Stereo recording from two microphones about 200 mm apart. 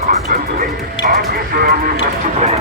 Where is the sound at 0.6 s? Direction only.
50° right (ahead or behind).